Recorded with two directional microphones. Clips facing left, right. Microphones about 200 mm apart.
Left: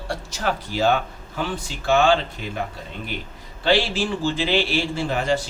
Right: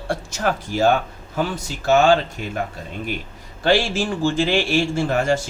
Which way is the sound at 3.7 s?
45° right (ahead or behind).